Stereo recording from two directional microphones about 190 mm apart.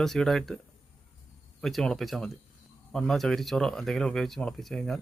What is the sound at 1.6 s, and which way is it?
Speech, centre (ahead or behind).